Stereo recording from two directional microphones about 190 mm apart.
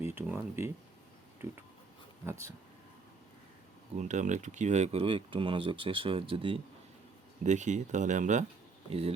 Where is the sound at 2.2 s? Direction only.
15° right (ahead or behind).